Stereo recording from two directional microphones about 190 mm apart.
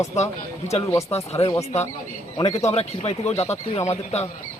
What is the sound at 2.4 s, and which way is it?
Speech, 30° left (ahead or behind).